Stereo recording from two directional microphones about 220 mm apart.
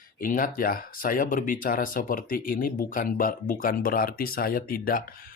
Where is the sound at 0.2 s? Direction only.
40° left (ahead or behind).